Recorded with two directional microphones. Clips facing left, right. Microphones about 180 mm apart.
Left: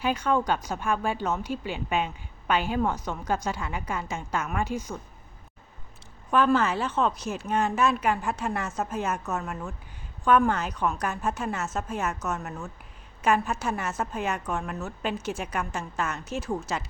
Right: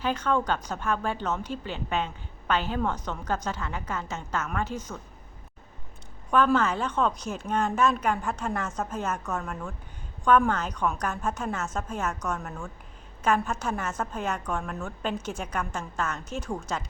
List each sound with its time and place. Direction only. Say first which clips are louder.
0.0 s a woman's voice: left 1 dB; 10° left (ahead or behind)
6.3 s a woman's voice: even; 5° left (ahead or behind)